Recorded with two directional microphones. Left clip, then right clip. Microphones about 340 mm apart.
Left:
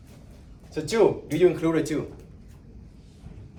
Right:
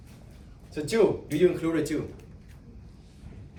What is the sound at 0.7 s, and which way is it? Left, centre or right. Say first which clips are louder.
Speech: left 2 dB; centre.